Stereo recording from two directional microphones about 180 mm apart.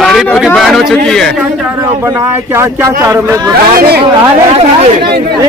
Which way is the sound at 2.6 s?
15° right (ahead or behind).